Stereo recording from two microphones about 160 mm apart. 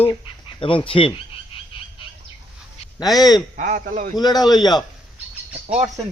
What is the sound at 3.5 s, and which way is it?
Speech, 50° right (ahead or behind).